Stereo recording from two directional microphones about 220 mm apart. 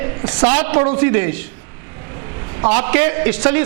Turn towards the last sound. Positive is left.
turn(degrees=-15)  # may be behind; listen again after turning